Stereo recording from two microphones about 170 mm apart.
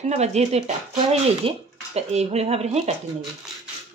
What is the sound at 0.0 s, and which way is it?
Speech, 40° right (ahead or behind).